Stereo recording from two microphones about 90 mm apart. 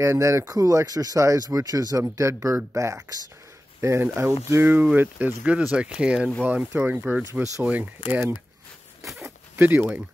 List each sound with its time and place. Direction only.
0.0 s speech: 35° right (ahead or behind); by 5.6 s 15° right (ahead or behind)
5.6 s speech: 5° right (ahead or behind)
6.4 s speech: 20° right (ahead or behind)
9.6 s speech: 20° right (ahead or behind)